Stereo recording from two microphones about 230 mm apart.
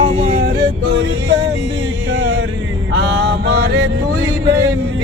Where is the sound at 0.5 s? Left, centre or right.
Right.